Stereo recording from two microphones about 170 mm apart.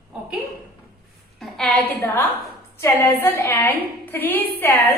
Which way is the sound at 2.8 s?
15° left (ahead or behind).